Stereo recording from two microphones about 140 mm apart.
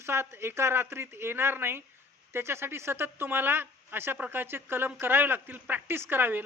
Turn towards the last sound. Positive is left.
turn(degrees=-15)  # may be behind; listen again after turning